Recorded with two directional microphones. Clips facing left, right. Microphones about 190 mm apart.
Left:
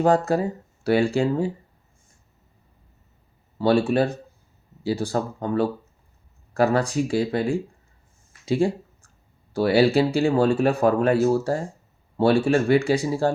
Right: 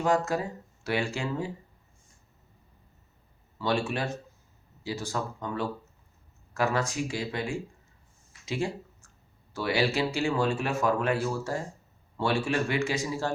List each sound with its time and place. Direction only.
0.0 s speech: 35° left (ahead or behind)
3.6 s speech: 35° left (ahead or behind)